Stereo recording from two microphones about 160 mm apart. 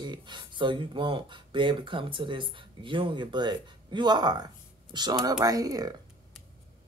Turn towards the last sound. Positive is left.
turn(degrees=-25)  # may be behind; listen again after turning